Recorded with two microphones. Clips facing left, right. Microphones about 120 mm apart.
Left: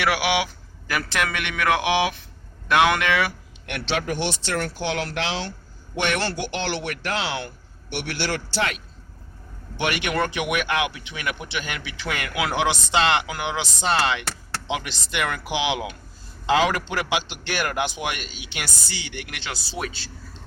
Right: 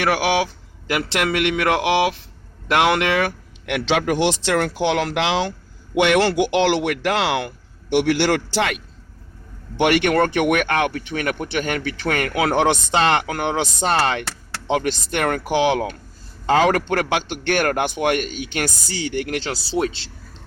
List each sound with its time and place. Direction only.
0.0 s speech: 45° right (ahead or behind)
0.9 s speech: 25° right (ahead or behind)
3.7 s speech: 90° right
9.7 s speech: 75° right (ahead or behind); by 20.1 s 25° right (ahead or behind)